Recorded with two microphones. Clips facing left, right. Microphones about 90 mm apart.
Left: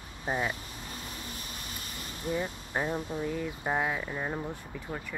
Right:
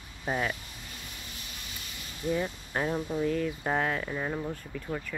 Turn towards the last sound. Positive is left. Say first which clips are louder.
# right 3 dB
turn(degrees=15)  # may be behind; listen again after turning